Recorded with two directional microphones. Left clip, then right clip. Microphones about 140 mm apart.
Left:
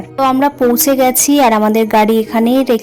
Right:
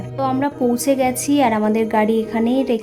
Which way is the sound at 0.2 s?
35° left (ahead or behind).